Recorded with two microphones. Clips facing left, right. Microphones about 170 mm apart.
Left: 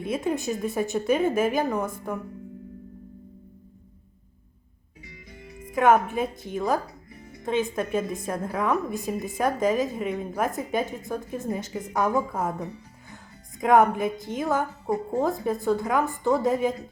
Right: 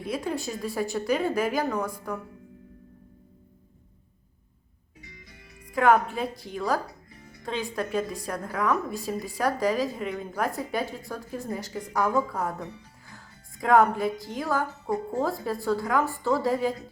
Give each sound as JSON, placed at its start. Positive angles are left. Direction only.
{"t": 0.0, "sound": "a woman's voice", "side_deg": 25}
{"t": 5.4, "sound": "a woman's voice", "side_deg": 20}